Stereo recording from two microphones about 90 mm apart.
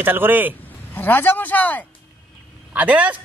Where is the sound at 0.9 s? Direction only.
20° left (ahead or behind).